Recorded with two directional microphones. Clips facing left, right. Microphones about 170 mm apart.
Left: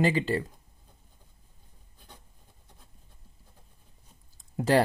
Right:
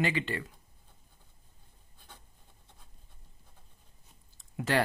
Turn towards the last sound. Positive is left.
turn(degrees=35)  # may be behind; listen again after turning